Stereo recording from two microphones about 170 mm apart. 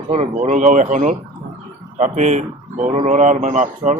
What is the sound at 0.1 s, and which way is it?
Speech, 40° right (ahead or behind).